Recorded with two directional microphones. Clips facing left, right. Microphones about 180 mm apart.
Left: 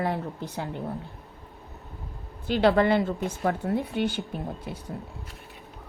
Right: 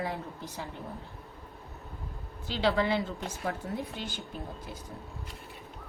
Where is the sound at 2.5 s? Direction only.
55° left (ahead or behind).